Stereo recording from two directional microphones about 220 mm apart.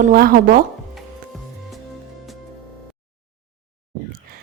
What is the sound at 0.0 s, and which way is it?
Speech, 40° right (ahead or behind).